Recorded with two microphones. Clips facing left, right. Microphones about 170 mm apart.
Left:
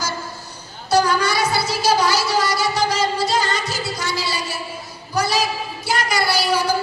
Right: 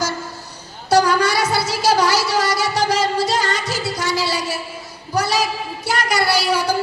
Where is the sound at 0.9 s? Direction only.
80° right.